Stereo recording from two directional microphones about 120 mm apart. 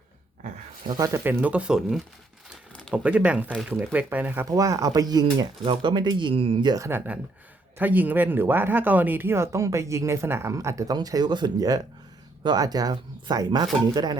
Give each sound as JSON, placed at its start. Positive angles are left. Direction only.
{"t": 0.9, "sound": "speech", "side_deg": -30}
{"t": 1.2, "sound": "speech", "side_deg": -15}
{"t": 4.4, "sound": "speech", "side_deg": -30}
{"t": 6.8, "sound": "speech", "side_deg": -15}